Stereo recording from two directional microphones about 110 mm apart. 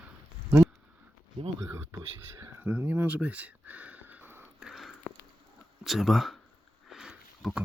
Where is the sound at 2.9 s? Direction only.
15° right (ahead or behind).